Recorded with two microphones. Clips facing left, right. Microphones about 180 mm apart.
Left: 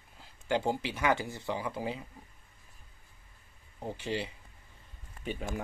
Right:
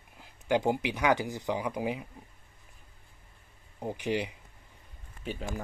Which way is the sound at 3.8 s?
15° right (ahead or behind).